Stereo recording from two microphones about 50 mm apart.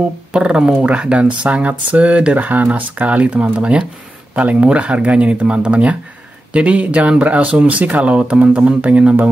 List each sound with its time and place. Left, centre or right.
0.3 s speech: centre